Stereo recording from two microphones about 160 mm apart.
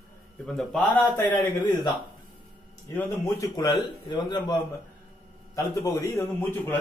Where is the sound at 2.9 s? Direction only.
20° left (ahead or behind).